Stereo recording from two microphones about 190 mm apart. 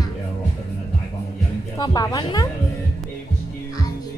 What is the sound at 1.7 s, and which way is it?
Speech, 20° left (ahead or behind).